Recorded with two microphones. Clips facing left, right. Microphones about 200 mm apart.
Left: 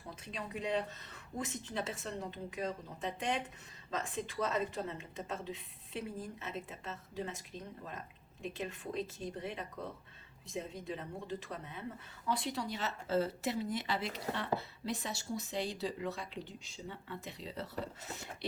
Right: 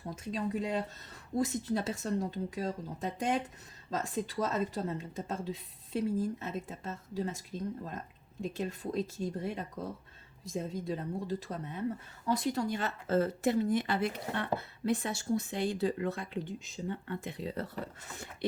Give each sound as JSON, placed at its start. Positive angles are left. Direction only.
{"t": 0.1, "sound": "a woman's voice", "side_deg": -40}
{"t": 1.5, "sound": "a woman's voice", "side_deg": -40}
{"t": 10.7, "sound": "speech", "side_deg": -35}